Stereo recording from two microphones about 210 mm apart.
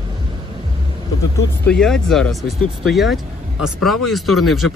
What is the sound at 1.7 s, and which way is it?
Speech, 5° left (ahead or behind).